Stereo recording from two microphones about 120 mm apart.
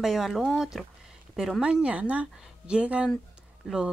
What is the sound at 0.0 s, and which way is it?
A woman's voice, centre (ahead or behind).